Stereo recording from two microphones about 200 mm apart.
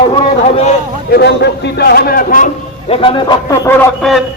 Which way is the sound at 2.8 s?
25° left (ahead or behind).